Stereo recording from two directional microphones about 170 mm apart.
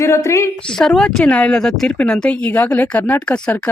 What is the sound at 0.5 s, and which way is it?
Speech, 5° left (ahead or behind).